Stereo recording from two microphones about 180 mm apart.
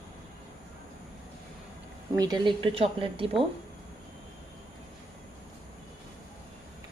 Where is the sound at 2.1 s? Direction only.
20° right (ahead or behind).